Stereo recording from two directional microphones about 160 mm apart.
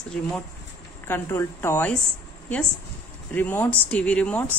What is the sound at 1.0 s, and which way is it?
Speech, 15° left (ahead or behind).